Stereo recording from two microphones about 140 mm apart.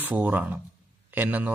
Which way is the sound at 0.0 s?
10° right (ahead or behind).